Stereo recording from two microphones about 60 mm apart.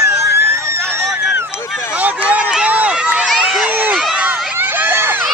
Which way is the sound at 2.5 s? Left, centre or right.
Centre.